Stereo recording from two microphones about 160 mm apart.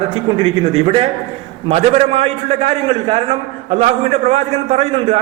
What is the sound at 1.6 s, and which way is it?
A man's voice, 45° right (ahead or behind).